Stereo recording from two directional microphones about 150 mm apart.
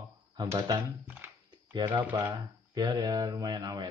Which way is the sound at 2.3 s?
25° right (ahead or behind).